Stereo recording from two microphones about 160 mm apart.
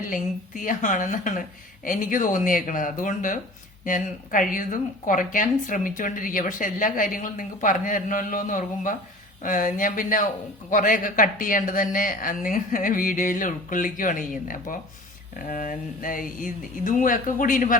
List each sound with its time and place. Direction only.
0.1 s speech: 55° left (ahead or behind)